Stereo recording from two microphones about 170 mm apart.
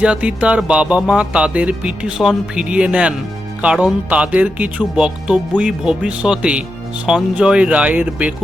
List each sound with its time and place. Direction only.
0.0 s music: 5° right (ahead or behind)